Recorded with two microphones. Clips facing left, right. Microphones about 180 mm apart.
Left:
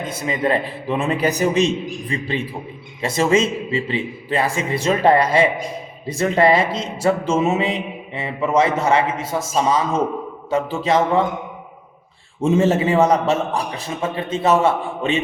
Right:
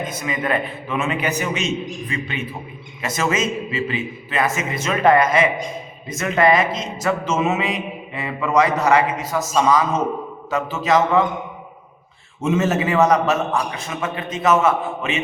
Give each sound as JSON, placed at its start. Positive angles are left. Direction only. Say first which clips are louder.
{"t": 0.1, "sound": "a man's voice", "louder": "left 6 dB", "side_deg": 30}
{"t": 12.4, "sound": "a man's voice", "louder": "left 3 dB", "side_deg": 30}